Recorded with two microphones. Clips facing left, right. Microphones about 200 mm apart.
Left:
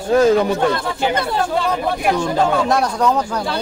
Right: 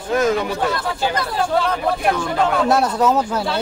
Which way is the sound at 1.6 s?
5° left (ahead or behind).